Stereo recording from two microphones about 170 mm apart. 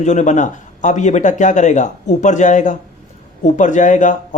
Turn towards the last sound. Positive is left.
turn(degrees=45)  # may be behind; listen again after turning